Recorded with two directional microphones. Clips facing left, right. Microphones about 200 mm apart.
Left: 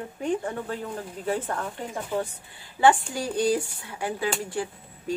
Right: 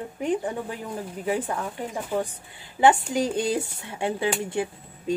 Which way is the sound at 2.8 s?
20° right (ahead or behind).